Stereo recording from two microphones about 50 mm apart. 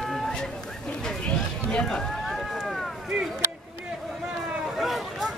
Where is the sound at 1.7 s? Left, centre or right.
Centre.